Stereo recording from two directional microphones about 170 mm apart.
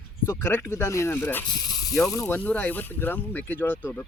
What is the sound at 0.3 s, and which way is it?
Speech, 15° left (ahead or behind).